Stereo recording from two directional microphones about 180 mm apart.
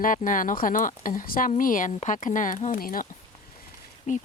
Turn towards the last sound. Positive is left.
turn(degrees=45)  # may be behind; listen again after turning